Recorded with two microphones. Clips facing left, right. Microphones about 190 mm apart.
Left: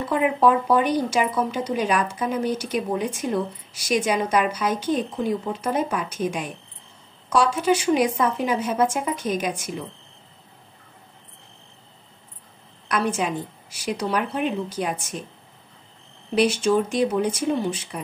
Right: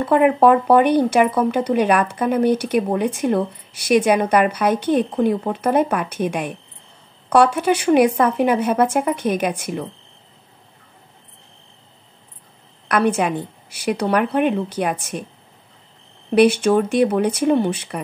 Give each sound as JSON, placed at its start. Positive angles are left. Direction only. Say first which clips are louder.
{"t": 0.0, "sound": "speech", "louder": "right 6 dB", "side_deg": -60}
{"t": 12.8, "sound": "speech", "louder": "right 6 dB", "side_deg": -60}
{"t": 16.3, "sound": "speech", "louder": "right 5 dB", "side_deg": -60}